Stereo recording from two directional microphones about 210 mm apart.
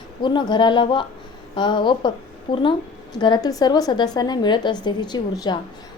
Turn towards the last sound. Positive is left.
turn(degrees=20)  # may be behind; listen again after turning